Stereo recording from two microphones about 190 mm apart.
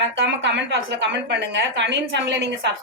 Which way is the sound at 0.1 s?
65° right (ahead or behind).